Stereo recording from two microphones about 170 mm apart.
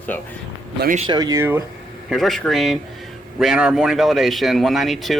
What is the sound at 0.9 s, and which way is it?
Speech, 25° right (ahead or behind).